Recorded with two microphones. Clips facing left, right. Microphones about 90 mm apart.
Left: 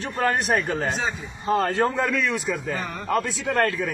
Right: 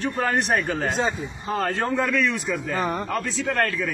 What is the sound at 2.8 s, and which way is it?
Speech, 55° right (ahead or behind).